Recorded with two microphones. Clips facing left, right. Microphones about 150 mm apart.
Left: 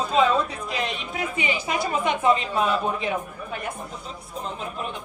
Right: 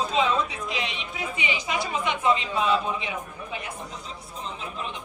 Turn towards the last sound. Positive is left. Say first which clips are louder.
# left 2 dB
turn(degrees=50)  # may be behind; listen again after turning